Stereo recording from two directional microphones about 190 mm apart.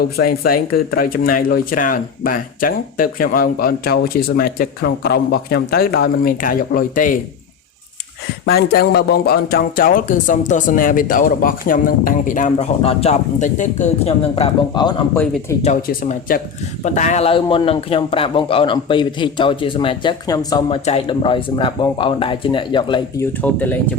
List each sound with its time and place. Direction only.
0.0 s speech: 55° left (ahead or behind)
8.4 s speech: 55° left (ahead or behind); by 15.2 s 25° left (ahead or behind)
15.6 s a man's voice: 40° left (ahead or behind); by 20.7 s 20° left (ahead or behind)
20.8 s a man's voice: 30° left (ahead or behind)
23.4 s speech: 10° left (ahead or behind)